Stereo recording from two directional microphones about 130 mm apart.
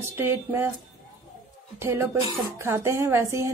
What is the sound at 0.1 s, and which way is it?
Speech, 15° right (ahead or behind).